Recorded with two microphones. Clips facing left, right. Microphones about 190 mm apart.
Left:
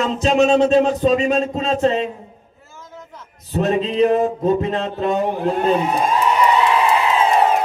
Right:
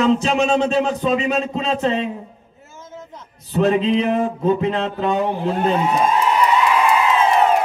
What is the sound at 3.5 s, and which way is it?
Mantra, 40° left (ahead or behind).